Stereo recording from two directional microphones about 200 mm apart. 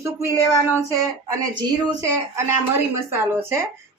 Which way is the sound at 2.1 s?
15° right (ahead or behind).